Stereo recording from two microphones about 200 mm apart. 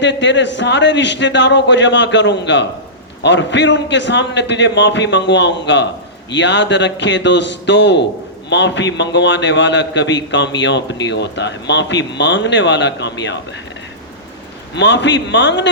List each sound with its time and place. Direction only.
0.0 s a man's voice: 60° left (ahead or behind)
14.8 s a man's voice: 60° left (ahead or behind)